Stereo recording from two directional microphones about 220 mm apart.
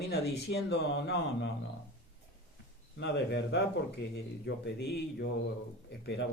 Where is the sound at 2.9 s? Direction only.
50° left (ahead or behind).